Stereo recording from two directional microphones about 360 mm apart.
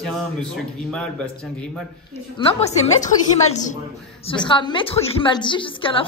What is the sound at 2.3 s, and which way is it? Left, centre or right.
Speech, centre.